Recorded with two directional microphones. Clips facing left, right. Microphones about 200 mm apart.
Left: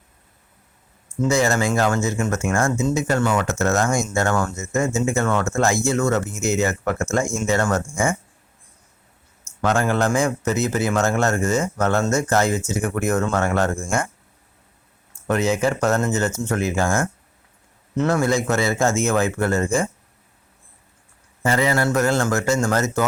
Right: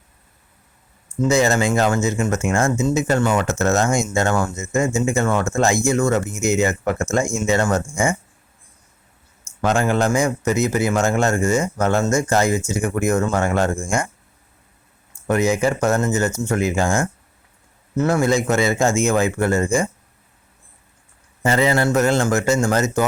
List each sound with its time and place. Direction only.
1.3 s speech: 20° right (ahead or behind)
9.6 s speech: 15° right (ahead or behind)
15.3 s speech: 10° right (ahead or behind)
21.4 s speech: 25° right (ahead or behind)